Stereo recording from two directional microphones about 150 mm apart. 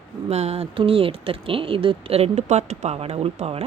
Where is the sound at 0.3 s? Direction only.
45° right (ahead or behind).